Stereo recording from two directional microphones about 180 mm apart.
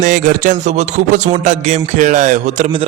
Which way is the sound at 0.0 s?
45° right (ahead or behind).